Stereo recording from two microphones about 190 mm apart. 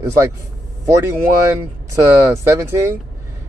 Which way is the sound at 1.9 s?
15° right (ahead or behind).